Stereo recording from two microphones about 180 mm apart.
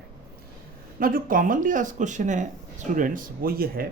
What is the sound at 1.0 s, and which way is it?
Speech, 50° right (ahead or behind).